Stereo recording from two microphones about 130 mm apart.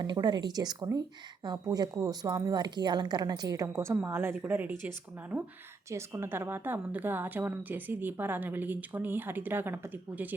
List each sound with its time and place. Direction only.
0.0 s a woman's voice: 35° right (ahead or behind); by 4.8 s 15° right (ahead or behind)
5.9 s a woman's voice: 20° right (ahead or behind)